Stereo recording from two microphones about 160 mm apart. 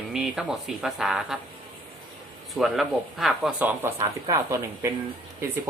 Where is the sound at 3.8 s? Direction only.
15° right (ahead or behind).